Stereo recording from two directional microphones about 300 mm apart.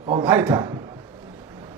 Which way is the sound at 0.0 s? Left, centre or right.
Centre.